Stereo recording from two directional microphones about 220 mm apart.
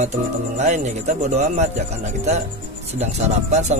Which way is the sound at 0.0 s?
30° right (ahead or behind).